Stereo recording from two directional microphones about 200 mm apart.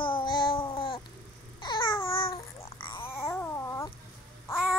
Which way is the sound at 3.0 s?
10° left (ahead or behind).